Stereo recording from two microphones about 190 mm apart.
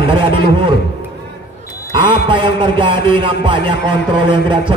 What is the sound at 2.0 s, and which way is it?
A man's voice, 25° right (ahead or behind).